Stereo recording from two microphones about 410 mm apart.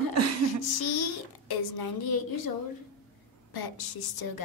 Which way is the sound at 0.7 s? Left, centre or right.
Left.